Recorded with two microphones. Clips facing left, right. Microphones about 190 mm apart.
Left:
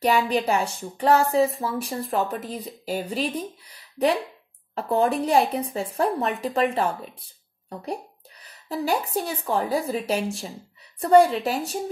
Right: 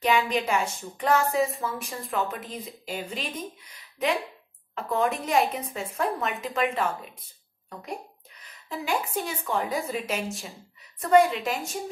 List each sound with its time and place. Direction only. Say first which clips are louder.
0.0 s speech: left 3 dB; 35° left (ahead or behind)
4.7 s speech: left 4 dB; 35° left (ahead or behind)